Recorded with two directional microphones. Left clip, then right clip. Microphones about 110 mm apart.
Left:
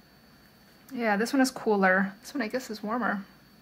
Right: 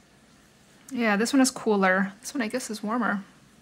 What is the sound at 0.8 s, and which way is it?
Speech, 50° right (ahead or behind).